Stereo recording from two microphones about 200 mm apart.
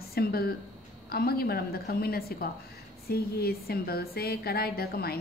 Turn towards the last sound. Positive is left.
turn(degrees=50)  # may be behind; listen again after turning